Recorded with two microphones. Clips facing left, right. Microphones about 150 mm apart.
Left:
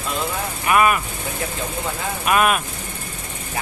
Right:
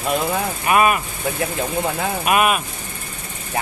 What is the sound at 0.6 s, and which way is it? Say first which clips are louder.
Speech: even; 25° right (ahead or behind).